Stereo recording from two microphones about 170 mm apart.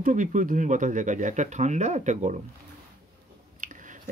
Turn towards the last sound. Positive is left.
turn(degrees=-50)  # may be behind; listen again after turning